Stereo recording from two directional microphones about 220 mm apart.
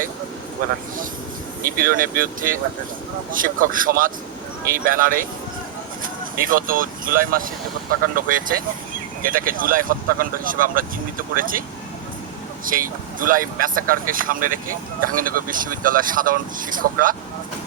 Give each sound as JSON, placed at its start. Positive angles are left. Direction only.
{"t": 1.6, "sound": "speech", "side_deg": -40}
{"t": 6.3, "sound": "speech", "side_deg": -40}
{"t": 12.6, "sound": "speech", "side_deg": -40}